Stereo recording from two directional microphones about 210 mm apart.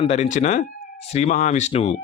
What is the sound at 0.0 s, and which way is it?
Speech, 30° left (ahead or behind).